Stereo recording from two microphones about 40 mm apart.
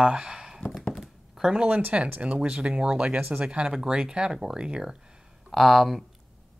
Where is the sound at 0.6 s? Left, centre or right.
Centre.